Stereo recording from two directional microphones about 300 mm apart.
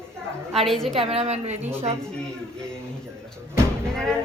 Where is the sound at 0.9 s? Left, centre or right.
Centre.